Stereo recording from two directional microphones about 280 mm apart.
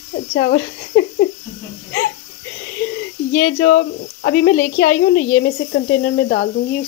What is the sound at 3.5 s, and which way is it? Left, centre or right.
Speech, left.